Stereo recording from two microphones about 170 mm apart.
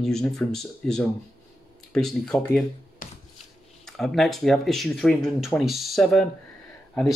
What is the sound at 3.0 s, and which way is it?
Hands, 50° left (ahead or behind).